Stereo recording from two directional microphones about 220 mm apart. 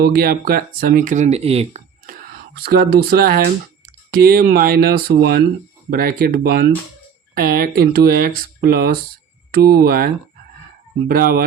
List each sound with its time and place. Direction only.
0.0 s speech: 40° right (ahead or behind)
2.3 s speech: 45° right (ahead or behind)
11.1 s speech: 45° right (ahead or behind)